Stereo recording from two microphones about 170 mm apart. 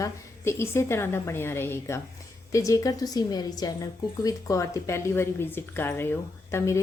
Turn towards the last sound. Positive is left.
turn(degrees=15)  # may be behind; listen again after turning